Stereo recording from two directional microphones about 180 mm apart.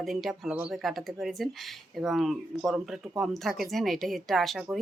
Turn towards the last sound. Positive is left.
turn(degrees=0)  # may be behind; listen again after turning